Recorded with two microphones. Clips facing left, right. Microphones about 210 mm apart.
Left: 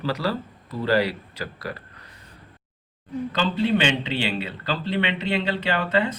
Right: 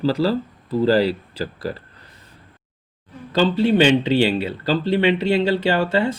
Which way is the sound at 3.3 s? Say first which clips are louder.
Right 6 dB; 30° right (ahead or behind).